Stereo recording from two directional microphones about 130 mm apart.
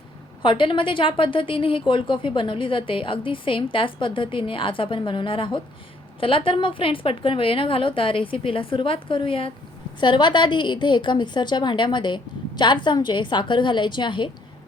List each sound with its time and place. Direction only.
0.4 s a woman's voice: 40° left (ahead or behind)